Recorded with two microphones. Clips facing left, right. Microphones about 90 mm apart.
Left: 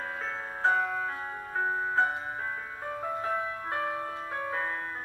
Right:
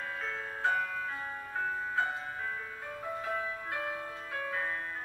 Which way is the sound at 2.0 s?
25° left (ahead or behind).